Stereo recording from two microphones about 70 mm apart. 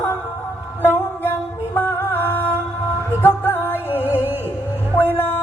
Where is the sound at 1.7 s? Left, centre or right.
Left.